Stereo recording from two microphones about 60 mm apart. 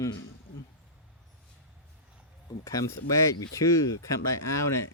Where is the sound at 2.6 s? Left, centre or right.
Left.